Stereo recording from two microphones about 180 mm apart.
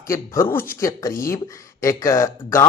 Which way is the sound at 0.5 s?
50° left (ahead or behind).